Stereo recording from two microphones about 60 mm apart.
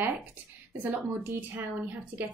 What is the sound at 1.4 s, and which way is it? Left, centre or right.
Speech, right.